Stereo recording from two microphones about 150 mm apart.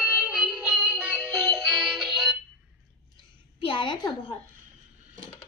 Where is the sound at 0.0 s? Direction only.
10° right (ahead or behind).